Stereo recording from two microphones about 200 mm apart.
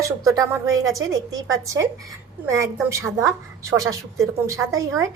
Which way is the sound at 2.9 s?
15° right (ahead or behind).